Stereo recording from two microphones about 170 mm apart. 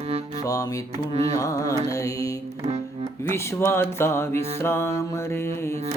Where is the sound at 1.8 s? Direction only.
20° left (ahead or behind).